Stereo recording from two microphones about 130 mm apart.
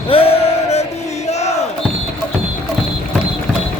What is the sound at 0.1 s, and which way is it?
Music, 50° left (ahead or behind).